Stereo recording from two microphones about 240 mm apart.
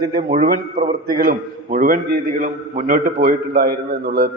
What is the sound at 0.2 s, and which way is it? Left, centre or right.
A man's voice, right.